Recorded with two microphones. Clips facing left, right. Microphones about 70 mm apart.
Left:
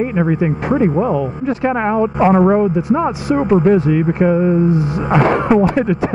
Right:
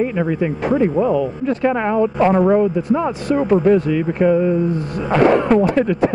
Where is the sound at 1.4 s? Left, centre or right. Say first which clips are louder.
Left 1 dB; centre.